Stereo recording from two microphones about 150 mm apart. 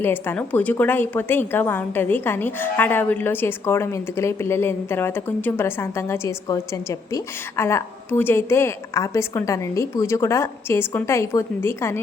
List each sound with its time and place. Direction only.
0.0 s a woman's voice: 15° left (ahead or behind)